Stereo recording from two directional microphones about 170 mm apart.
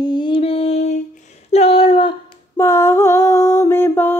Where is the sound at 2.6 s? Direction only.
15° left (ahead or behind).